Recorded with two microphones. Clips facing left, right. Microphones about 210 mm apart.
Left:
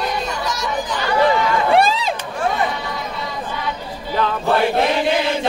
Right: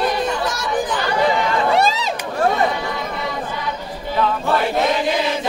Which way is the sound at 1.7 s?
55° left (ahead or behind).